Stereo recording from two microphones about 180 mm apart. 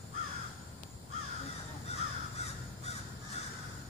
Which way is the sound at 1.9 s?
35° left (ahead or behind).